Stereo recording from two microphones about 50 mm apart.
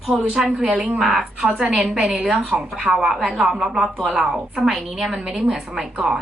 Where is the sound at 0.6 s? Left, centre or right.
Right.